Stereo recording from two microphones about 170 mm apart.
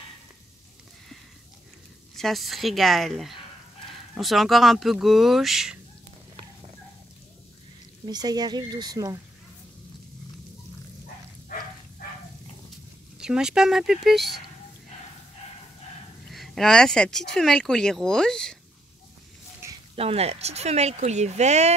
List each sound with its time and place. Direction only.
2.1 s speech: centre (ahead or behind)
8.0 s speech: 25° right (ahead or behind)
13.2 s speech: 5° right (ahead or behind)
16.3 s speech: centre (ahead or behind)
20.0 s speech: 35° right (ahead or behind)